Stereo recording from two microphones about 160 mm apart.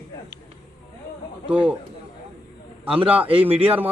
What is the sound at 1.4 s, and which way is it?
Speech, 10° right (ahead or behind).